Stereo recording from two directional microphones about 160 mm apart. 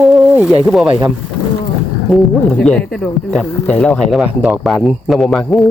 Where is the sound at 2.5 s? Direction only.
5° left (ahead or behind).